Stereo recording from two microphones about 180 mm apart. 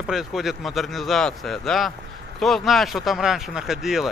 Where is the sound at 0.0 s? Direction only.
Centre (ahead or behind).